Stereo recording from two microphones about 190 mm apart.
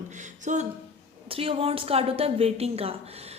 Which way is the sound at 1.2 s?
30° right (ahead or behind).